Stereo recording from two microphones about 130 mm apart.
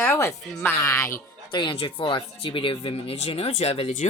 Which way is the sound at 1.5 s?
35° left (ahead or behind).